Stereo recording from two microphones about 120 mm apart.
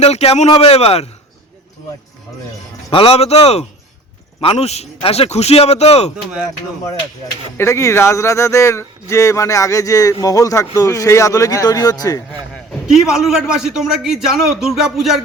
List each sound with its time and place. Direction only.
0.0 s speech: 60° left (ahead or behind)
2.9 s speech: 55° left (ahead or behind)
7.6 s speech: 25° left (ahead or behind)
12.9 s a man's voice: 5° right (ahead or behind)